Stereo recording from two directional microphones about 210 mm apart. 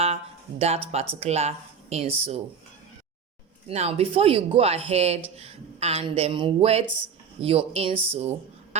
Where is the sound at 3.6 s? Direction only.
30° right (ahead or behind).